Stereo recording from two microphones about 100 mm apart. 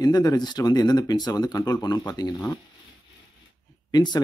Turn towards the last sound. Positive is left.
turn(degrees=45)  # may be behind; listen again after turning